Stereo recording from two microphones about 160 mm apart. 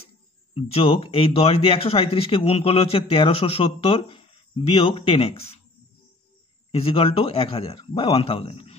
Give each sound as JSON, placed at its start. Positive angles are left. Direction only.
{"t": 0.6, "sound": "speech", "side_deg": 40}
{"t": 6.7, "sound": "speech", "side_deg": 35}